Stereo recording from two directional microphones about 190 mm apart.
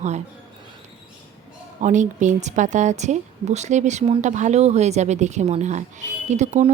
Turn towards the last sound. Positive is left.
turn(degrees=-35)  # may be behind; listen again after turning